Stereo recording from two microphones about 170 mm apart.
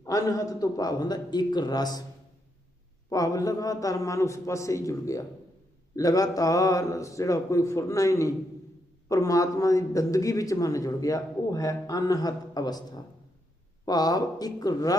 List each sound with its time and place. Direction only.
0.0 s speech: 20° left (ahead or behind)
3.1 s speech: 20° left (ahead or behind)